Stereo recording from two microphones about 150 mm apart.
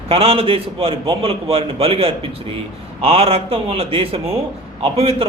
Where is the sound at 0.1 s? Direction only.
40° right (ahead or behind).